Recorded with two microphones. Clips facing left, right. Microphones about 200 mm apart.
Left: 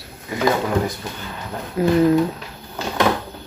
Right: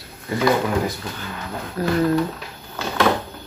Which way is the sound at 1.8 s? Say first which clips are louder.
Left 5 dB; 20° left (ahead or behind).